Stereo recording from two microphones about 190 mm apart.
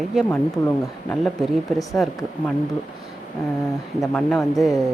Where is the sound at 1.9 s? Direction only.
Centre (ahead or behind).